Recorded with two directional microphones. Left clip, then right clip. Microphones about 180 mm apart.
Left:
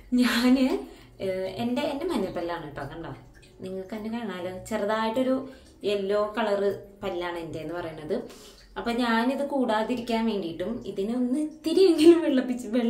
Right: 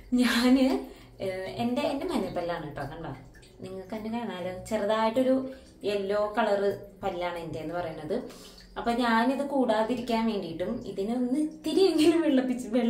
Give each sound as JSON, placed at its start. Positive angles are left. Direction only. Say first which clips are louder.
{"t": 0.1, "sound": "a woman's voice", "louder": "left 1 dB", "side_deg": 15}